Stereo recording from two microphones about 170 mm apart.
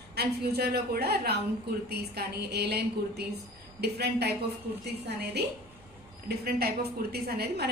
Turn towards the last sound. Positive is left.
turn(degrees=-70)  # may be behind; listen again after turning